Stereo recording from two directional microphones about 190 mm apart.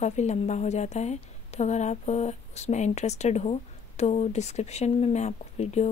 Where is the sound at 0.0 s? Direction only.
35° left (ahead or behind).